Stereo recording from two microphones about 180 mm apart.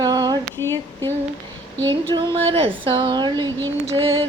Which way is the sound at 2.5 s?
30° right (ahead or behind).